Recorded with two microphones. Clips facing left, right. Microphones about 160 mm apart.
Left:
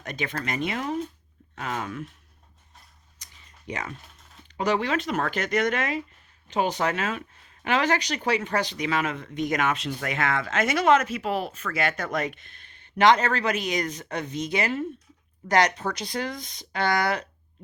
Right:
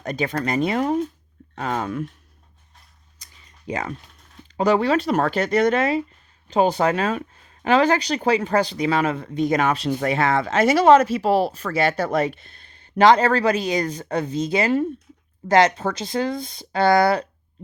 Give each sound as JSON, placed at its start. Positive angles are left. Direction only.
{"t": 0.0, "sound": "speech", "side_deg": -35}
{"t": 3.7, "sound": "speech", "side_deg": -30}